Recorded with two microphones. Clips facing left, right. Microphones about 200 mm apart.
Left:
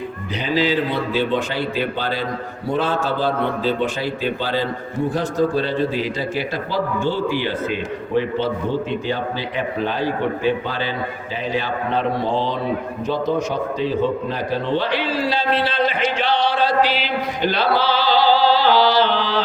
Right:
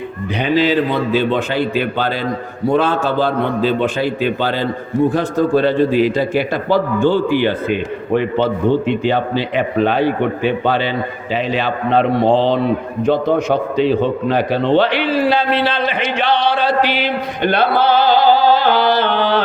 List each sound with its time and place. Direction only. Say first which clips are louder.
0.3 s a man's voice: right 5 dB; 60° right (ahead or behind)
2.7 s a man's voice: right 5 dB; 60° right (ahead or behind)
8.9 s a man's voice: right 7 dB; 70° right (ahead or behind)